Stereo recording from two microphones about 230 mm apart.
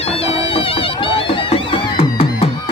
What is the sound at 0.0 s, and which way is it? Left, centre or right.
Music, left.